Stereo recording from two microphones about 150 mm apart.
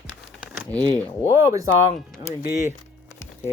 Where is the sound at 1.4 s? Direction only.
20° right (ahead or behind).